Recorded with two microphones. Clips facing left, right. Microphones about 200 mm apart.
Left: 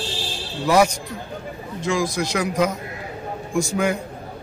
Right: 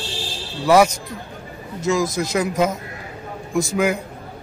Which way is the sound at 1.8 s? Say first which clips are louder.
Right 3 dB; 45° right (ahead or behind).